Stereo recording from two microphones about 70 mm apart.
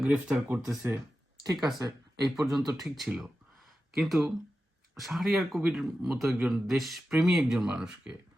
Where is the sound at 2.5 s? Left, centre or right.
Centre.